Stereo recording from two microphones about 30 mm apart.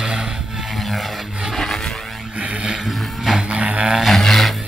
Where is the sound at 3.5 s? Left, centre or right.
Right.